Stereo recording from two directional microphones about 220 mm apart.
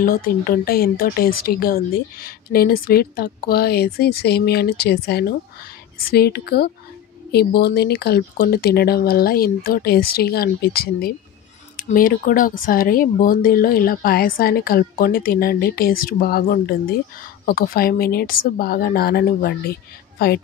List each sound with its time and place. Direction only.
0.0 s speech: 40° left (ahead or behind)